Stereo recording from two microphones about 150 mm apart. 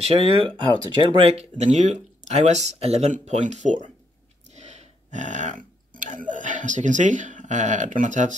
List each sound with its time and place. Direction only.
0.0 s speech: 40° right (ahead or behind)
0.6 s speech: 25° right (ahead or behind); by 3.9 s 55° right (ahead or behind)
4.6 s a sound: 50° right (ahead or behind)
6.1 s speech: 55° right (ahead or behind)